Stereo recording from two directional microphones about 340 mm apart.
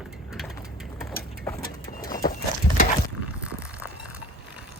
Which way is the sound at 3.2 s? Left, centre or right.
Centre.